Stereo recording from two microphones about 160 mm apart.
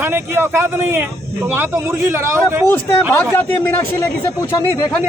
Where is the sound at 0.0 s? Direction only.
15° right (ahead or behind).